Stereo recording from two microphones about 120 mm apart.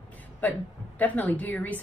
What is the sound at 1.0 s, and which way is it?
Speech, 15° left (ahead or behind).